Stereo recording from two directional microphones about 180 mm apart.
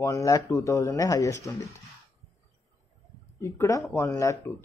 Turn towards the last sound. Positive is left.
turn(degrees=15)  # may be behind; listen again after turning